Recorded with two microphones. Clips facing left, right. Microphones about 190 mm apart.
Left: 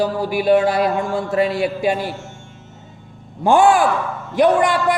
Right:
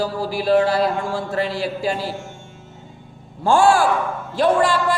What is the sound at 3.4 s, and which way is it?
A man's voice, 20° left (ahead or behind).